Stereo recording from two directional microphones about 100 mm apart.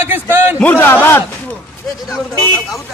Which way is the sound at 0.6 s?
20° left (ahead or behind).